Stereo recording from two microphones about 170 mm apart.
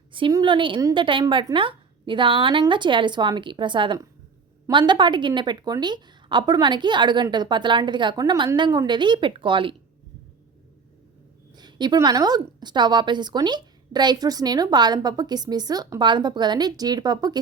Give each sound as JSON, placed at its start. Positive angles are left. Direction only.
{"t": 0.1, "sound": "a woman's voice", "side_deg": -25}
{"t": 11.5, "sound": "a woman's voice", "side_deg": -25}